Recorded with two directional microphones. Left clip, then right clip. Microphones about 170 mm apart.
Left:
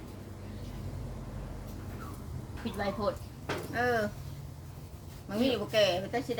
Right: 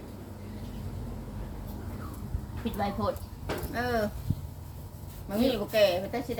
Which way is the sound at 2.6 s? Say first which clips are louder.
Right 3 dB; 20° right (ahead or behind).